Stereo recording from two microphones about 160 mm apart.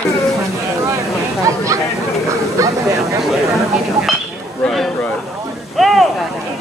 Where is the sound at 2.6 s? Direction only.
20° right (ahead or behind).